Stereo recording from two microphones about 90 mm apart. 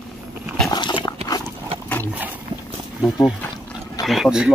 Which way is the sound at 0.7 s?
55° left (ahead or behind).